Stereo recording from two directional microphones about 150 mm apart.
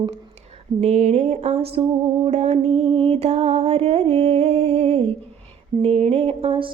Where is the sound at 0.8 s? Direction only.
50° right (ahead or behind).